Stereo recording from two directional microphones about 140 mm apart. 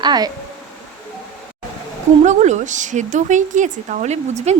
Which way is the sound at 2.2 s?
60° right (ahead or behind).